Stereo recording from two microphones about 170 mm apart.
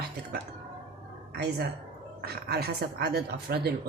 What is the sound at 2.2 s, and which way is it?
Speech, 70° right (ahead or behind).